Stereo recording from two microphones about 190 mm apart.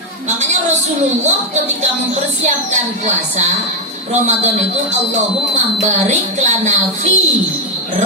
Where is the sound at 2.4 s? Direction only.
40° right (ahead or behind).